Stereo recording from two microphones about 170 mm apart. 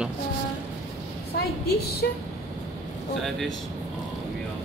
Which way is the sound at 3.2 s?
Centre (ahead or behind).